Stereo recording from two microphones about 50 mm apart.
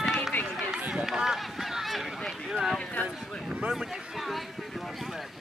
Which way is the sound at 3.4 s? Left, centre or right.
Centre.